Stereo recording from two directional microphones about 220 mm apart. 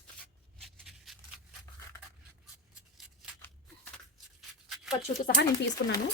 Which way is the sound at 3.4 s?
10° left (ahead or behind).